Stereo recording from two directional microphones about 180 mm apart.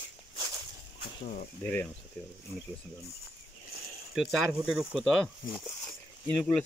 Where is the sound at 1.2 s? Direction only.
45° left (ahead or behind).